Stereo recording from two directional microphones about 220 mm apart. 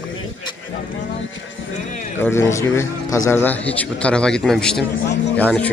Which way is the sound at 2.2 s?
10° left (ahead or behind).